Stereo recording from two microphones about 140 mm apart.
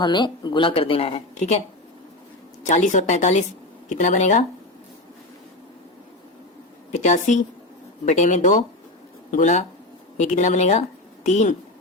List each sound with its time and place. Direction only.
0.0 s speech: 30° left (ahead or behind); by 1.6 s 55° left (ahead or behind)
2.6 s a woman's voice: 60° left (ahead or behind)
6.9 s a woman's voice: 60° left (ahead or behind)